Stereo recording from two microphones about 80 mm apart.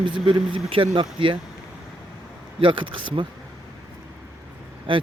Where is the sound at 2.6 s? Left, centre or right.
Right.